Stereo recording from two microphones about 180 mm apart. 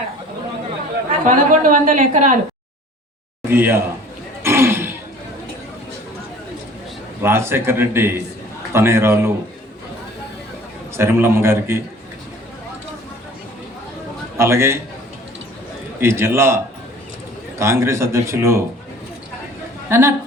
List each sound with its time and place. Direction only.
1.2 s a woman's voice: 45° right (ahead or behind)
3.5 s speech: 10° right (ahead or behind)
4.4 s a sound: 15° right (ahead or behind)
7.2 s speech: 15° right (ahead or behind)
10.9 s speech: 15° right (ahead or behind)
14.3 s speech: 15° right (ahead or behind)
16.0 s speech: 15° right (ahead or behind)
17.6 s speech: 15° right (ahead or behind)
19.9 s speech: 15° right (ahead or behind)